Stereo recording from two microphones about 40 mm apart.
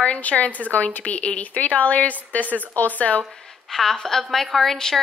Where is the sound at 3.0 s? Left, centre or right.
Left.